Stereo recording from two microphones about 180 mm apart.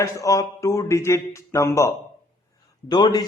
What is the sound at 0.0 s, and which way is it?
Speech, 15° left (ahead or behind).